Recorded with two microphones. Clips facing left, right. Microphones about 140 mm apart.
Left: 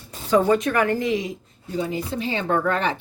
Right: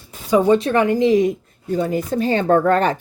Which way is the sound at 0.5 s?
25° right (ahead or behind).